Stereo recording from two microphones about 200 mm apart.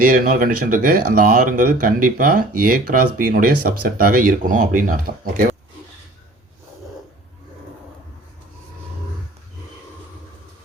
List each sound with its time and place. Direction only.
0.0 s speech: 45° right (ahead or behind)